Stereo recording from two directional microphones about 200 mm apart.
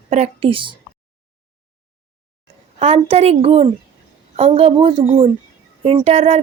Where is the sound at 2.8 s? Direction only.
30° right (ahead or behind).